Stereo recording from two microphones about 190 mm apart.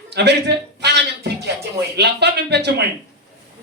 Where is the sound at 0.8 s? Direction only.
60° right (ahead or behind).